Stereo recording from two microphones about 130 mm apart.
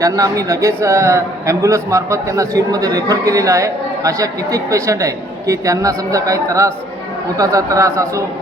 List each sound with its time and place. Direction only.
0.0 s a man's voice: 25° right (ahead or behind)